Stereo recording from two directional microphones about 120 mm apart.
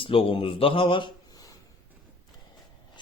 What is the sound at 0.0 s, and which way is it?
Speech, 50° left (ahead or behind).